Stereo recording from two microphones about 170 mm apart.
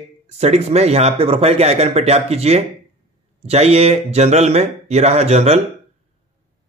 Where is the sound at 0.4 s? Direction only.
40° right (ahead or behind).